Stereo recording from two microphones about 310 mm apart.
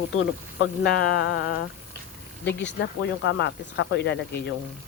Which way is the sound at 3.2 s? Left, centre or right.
Left.